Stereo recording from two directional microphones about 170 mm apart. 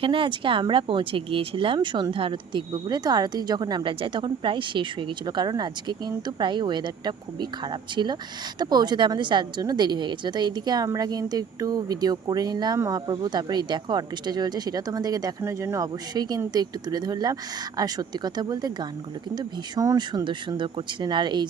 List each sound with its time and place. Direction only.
0.0 s speech: 30° right (ahead or behind)